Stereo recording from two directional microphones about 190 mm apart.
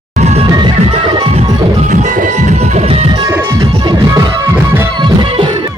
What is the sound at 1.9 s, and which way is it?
Music, 40° right (ahead or behind).